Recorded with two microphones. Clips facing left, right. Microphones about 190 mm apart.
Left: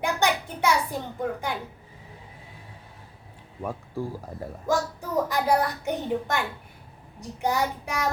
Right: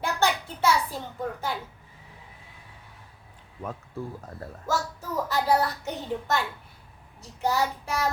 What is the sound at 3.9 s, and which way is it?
Speech, 35° left (ahead or behind).